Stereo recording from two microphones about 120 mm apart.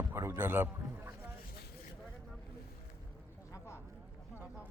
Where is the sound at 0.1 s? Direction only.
20° right (ahead or behind).